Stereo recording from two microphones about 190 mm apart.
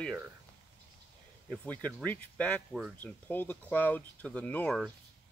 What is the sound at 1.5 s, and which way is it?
Speech, 5° left (ahead or behind).